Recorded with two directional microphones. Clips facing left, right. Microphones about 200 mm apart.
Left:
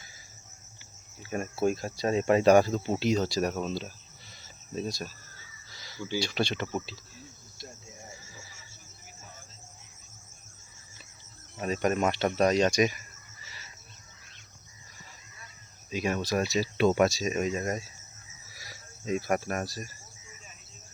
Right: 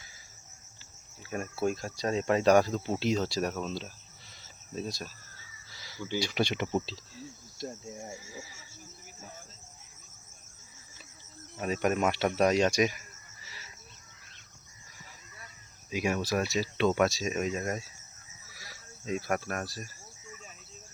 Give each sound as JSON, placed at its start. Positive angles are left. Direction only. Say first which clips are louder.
{"t": 1.6, "sound": "speech", "louder": "left 3 dB", "side_deg": 5}
{"t": 4.4, "sound": "cricket", "louder": "left 3 dB", "side_deg": 0}
{"t": 5.7, "sound": "a sound", "louder": "left 1 dB", "side_deg": -5}
{"t": 6.1, "sound": "speech", "louder": "even", "side_deg": -15}
{"t": 6.8, "sound": "speech", "louder": "right 4 dB", "side_deg": -35}
{"t": 8.1, "sound": "speech", "louder": "right 6 dB", "side_deg": -10}
{"t": 11.6, "sound": "speech", "louder": "left 1 dB", "side_deg": -5}
{"t": 15.9, "sound": "speech", "louder": "left 1 dB", "side_deg": -10}
{"t": 16.5, "sound": "speech", "louder": "left 3 dB", "side_deg": 5}
{"t": 19.2, "sound": "speech", "louder": "left 3 dB", "side_deg": 10}